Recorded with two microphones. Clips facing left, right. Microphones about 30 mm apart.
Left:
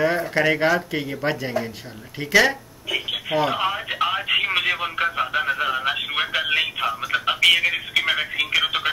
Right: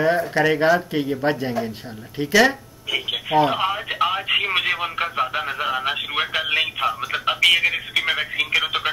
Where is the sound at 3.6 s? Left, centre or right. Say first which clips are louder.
Right 1 dB; centre.